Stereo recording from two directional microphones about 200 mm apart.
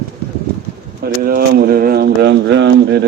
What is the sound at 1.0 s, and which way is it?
Speech, 50° right (ahead or behind).